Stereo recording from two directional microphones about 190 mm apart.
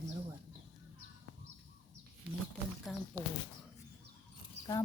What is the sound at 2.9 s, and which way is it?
Speech, centre (ahead or behind).